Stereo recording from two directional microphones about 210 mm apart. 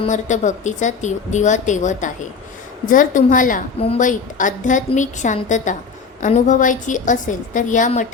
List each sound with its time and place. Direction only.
0.0 s a woman's voice: 35° left (ahead or behind)